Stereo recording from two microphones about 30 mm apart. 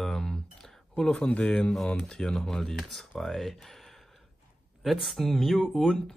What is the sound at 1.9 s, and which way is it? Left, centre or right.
Speech, centre.